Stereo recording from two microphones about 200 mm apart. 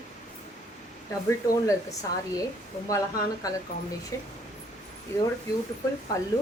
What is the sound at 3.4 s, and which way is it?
Speech, 15° left (ahead or behind).